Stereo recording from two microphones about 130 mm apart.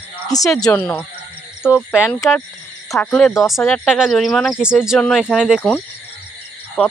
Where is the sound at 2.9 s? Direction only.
20° left (ahead or behind).